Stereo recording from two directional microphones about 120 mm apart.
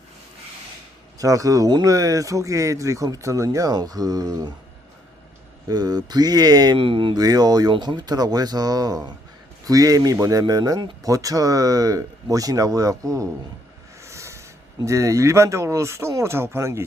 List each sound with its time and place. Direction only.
1.2 s speech: 30° right (ahead or behind)
5.6 s speech: 35° right (ahead or behind)
7.2 s speech: 35° right (ahead or behind)
14.0 s a sound: 25° right (ahead or behind)
14.8 s speech: 25° right (ahead or behind)